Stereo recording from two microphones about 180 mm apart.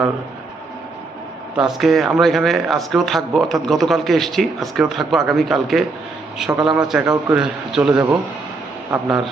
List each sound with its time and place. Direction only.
1.5 s speech: centre (ahead or behind)
7.0 s speech: 15° right (ahead or behind)
7.3 s speech: 5° right (ahead or behind)